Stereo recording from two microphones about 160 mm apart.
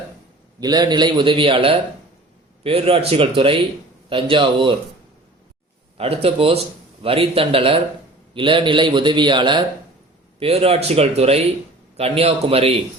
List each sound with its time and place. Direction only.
0.6 s speech: 25° right (ahead or behind)
6.0 s speech: 35° right (ahead or behind)